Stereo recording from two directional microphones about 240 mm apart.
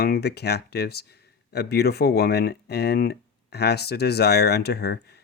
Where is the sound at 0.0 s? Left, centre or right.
Left.